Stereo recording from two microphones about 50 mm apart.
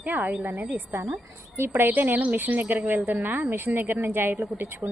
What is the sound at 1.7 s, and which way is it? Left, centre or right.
A woman's voice, right.